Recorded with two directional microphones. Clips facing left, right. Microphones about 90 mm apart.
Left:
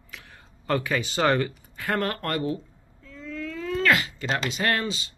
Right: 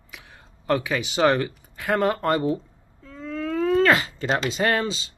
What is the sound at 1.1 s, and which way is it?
Speech, 10° right (ahead or behind).